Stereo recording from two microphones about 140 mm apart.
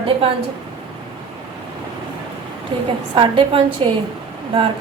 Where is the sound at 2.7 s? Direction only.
35° right (ahead or behind).